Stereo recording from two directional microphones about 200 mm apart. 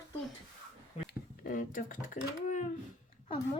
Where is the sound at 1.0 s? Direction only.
45° left (ahead or behind).